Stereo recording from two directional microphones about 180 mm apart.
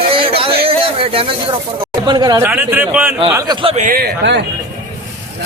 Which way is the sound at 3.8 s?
55° right (ahead or behind).